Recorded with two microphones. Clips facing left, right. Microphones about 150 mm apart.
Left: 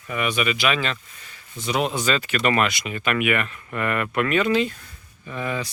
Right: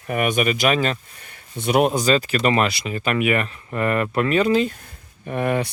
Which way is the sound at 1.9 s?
35° right (ahead or behind).